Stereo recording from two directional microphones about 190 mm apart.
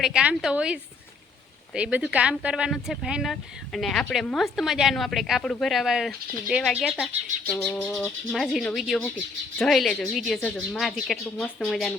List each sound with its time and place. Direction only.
0.0 s speech: 5° right (ahead or behind)
7.4 s speech: 5° left (ahead or behind)